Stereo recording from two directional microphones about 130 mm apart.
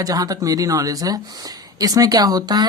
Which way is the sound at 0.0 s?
30° right (ahead or behind).